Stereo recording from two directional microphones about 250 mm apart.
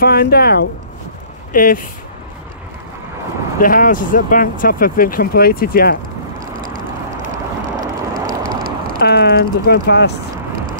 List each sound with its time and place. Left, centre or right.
0.0 s speech: left
3.5 s speech: left
6.4 s vehicle: right
9.0 s speech: left